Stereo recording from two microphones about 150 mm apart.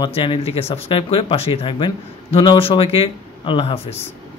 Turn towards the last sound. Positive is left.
turn(degrees=35)  # may be behind; listen again after turning